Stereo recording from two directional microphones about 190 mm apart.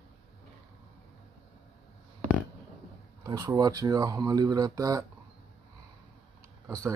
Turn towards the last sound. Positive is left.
turn(degrees=-15)  # may be behind; listen again after turning